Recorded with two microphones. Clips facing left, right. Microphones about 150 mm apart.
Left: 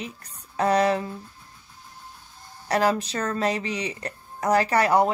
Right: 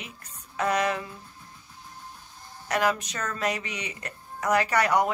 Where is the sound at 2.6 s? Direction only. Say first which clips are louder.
Left 3 dB; 35° left (ahead or behind).